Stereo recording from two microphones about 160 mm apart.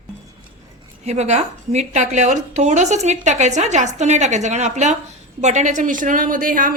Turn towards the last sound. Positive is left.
turn(degrees=-55)  # may be behind; listen again after turning